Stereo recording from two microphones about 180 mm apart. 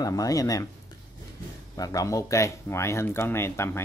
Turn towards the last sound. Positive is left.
turn(degrees=15)  # may be behind; listen again after turning